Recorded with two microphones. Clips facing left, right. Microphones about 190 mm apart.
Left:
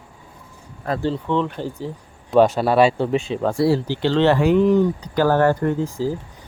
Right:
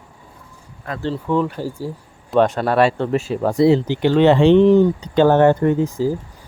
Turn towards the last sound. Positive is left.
turn(degrees=-15)  # may be behind; listen again after turning